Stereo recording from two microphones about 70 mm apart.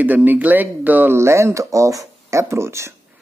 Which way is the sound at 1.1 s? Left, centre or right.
Right.